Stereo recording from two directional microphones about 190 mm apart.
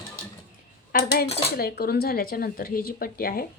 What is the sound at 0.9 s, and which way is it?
A woman's voice, 55° left (ahead or behind).